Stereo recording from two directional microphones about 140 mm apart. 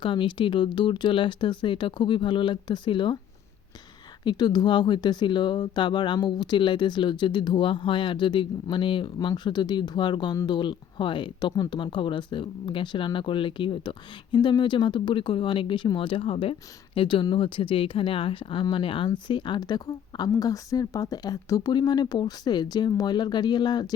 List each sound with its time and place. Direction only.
0.0 s speech: 35° left (ahead or behind)
4.2 s speech: 30° left (ahead or behind)